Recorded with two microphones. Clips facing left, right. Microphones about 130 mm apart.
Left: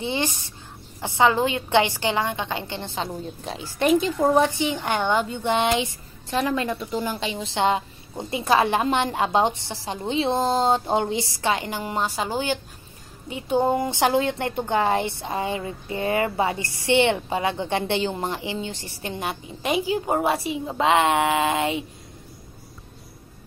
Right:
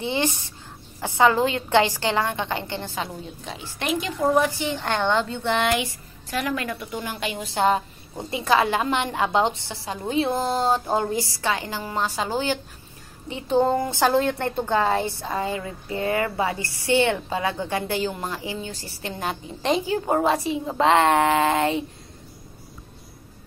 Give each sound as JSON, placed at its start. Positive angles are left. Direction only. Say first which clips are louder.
{"t": 0.0, "sound": "a woman's voice", "louder": "right 1 dB", "side_deg": 20}
{"t": 3.4, "sound": "a woman's voice", "louder": "left 7 dB", "side_deg": 40}